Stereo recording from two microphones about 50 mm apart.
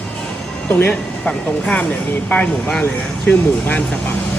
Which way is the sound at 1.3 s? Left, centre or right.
Left.